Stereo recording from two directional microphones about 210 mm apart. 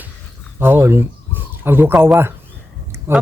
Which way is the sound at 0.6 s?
10° right (ahead or behind).